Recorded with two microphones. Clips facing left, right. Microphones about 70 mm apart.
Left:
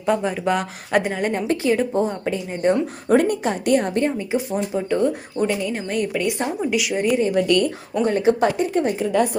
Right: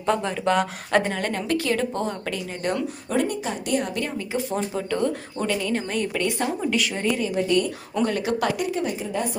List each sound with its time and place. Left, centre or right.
0.0 s speech: centre
1.3 s speech: left
3.1 s a woman's voice: left
4.2 s speech: left
7.3 s a woman's voice: left
8.0 s speech: left
8.7 s a woman's voice: left